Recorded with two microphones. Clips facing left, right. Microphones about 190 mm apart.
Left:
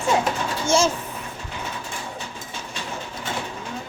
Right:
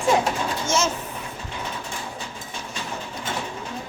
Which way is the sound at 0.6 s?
30° left (ahead or behind).